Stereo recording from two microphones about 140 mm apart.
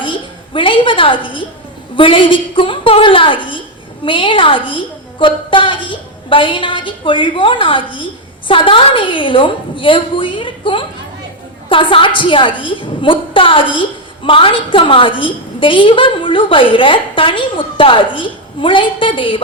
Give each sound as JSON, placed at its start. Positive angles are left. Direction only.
{"t": 0.0, "sound": "a woman's voice", "side_deg": 35}